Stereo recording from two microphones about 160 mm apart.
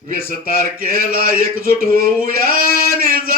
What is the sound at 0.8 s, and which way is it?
Male singing, 65° right (ahead or behind).